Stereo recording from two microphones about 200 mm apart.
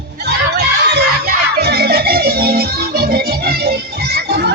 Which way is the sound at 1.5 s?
55° right (ahead or behind).